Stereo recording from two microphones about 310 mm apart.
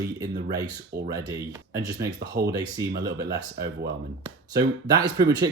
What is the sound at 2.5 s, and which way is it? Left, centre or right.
Speech, centre.